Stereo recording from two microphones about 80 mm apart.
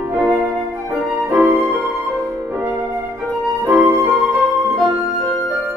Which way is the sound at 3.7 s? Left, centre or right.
Centre.